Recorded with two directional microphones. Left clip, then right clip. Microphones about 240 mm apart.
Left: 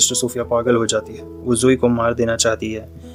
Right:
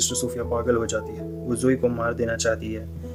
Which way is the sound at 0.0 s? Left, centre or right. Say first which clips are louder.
Left 7 dB; left.